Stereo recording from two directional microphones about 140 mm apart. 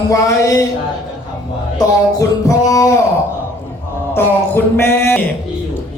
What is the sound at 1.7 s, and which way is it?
Music, 25° left (ahead or behind).